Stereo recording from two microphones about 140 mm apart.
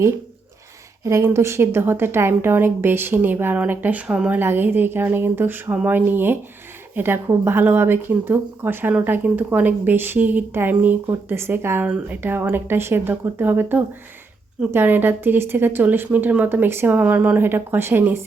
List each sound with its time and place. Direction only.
1.0 s speech: 20° right (ahead or behind)